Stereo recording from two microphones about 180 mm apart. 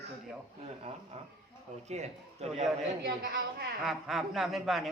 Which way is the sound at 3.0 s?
60° right (ahead or behind).